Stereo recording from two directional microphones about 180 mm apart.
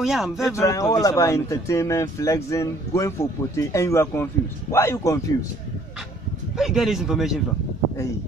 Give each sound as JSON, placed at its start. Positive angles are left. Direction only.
{"t": 0.0, "sound": "a man's voice", "side_deg": 0}
{"t": 0.5, "sound": "speech", "side_deg": 15}
{"t": 6.5, "sound": "a man's voice", "side_deg": 0}